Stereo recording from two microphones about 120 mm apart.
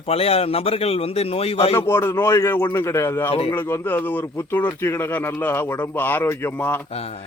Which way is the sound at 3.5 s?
20° left (ahead or behind).